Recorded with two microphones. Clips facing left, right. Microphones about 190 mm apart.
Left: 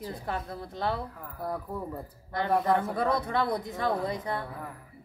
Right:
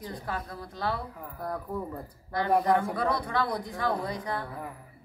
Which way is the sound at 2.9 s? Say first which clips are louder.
Left 1 dB; 25° left (ahead or behind).